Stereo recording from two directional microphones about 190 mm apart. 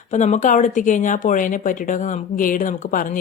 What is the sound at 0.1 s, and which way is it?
Speech, 40° left (ahead or behind).